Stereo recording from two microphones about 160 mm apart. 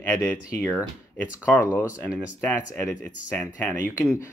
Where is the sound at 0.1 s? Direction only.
10° left (ahead or behind).